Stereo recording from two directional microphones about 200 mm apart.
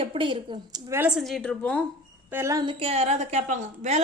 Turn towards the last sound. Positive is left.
turn(degrees=-35)  # may be behind; listen again after turning